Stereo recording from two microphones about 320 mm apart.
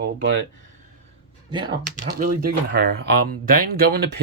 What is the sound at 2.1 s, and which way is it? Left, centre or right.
Speech, right.